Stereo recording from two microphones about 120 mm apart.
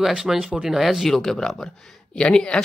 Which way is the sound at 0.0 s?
5° right (ahead or behind).